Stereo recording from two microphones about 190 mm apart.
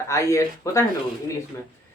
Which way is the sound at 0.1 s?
15° left (ahead or behind).